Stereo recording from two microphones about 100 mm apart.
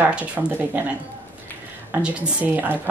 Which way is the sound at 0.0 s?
15° right (ahead or behind).